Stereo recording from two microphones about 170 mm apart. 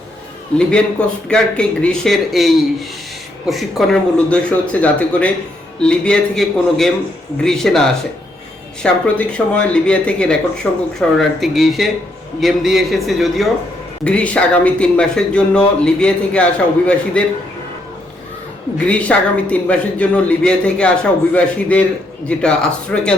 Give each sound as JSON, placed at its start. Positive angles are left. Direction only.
{"t": 0.5, "sound": "speech", "side_deg": 5}
{"t": 3.5, "sound": "speech", "side_deg": 0}
{"t": 18.9, "sound": "speech", "side_deg": 5}